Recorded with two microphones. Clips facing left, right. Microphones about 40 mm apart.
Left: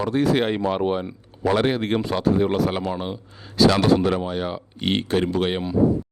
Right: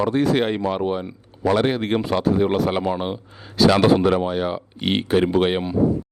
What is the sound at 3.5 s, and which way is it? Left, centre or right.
Speech, centre.